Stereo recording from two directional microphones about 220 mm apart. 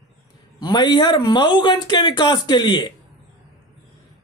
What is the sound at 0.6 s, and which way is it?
Speech, 20° left (ahead or behind).